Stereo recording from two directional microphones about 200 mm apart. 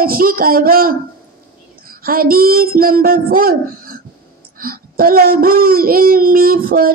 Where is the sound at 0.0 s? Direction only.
45° right (ahead or behind).